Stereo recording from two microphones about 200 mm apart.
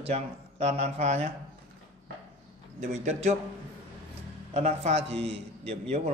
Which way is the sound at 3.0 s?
35° right (ahead or behind).